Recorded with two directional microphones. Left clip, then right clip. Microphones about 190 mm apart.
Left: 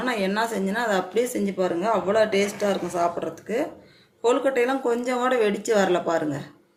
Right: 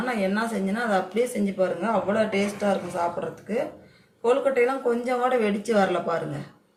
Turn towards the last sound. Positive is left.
turn(degrees=50)  # may be behind; listen again after turning